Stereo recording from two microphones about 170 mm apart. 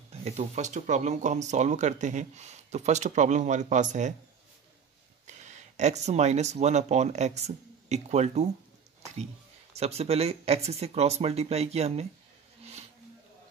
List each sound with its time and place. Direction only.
0.1 s speech: 35° right (ahead or behind)
5.2 s speech: 45° right (ahead or behind)
9.8 s speech: 35° right (ahead or behind)